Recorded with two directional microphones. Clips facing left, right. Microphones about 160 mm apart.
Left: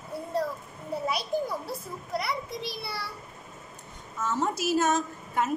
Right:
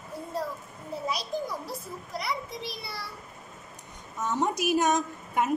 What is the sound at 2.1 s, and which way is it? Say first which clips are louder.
Speech: left 2 dB; 65° left (ahead or behind).